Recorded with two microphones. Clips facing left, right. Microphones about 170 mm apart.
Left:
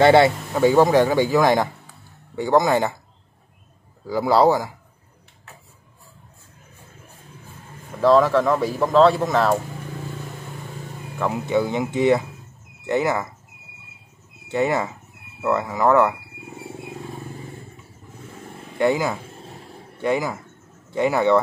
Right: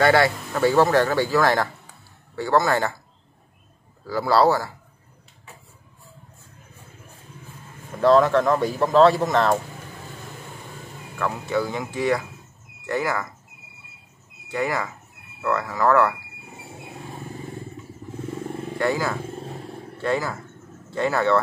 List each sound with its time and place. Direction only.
0.0 s speech: 20° left (ahead or behind)
4.1 s speech: 20° left (ahead or behind)
8.0 s speech: centre (ahead or behind)
11.1 s speech: 20° left (ahead or behind)
14.5 s speech: 25° left (ahead or behind)
18.8 s speech: 20° left (ahead or behind)